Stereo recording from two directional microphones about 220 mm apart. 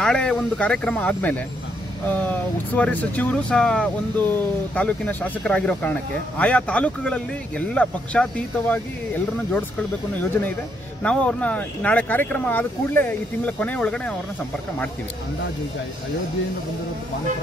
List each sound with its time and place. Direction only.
0.0 s speech: 5° left (ahead or behind)
11.0 s speech: 5° left (ahead or behind)